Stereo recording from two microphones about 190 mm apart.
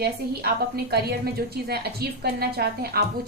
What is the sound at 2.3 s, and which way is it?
Speech, 55° right (ahead or behind).